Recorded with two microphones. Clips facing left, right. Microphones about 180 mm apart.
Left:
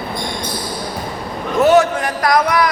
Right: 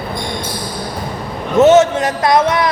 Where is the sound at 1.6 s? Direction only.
20° right (ahead or behind).